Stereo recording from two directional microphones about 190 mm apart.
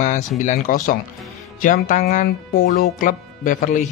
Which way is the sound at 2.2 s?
50° left (ahead or behind).